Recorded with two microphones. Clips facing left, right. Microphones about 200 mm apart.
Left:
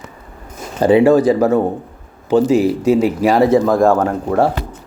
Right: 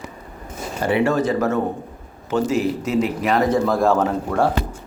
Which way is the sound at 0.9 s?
15° left (ahead or behind).